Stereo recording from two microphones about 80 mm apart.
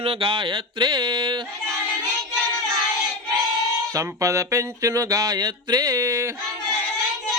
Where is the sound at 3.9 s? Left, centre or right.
Right.